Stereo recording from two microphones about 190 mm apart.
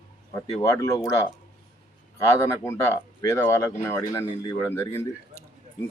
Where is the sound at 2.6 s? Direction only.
15° left (ahead or behind).